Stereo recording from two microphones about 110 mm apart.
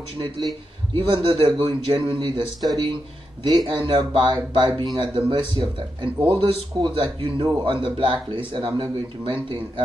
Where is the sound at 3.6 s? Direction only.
50° right (ahead or behind).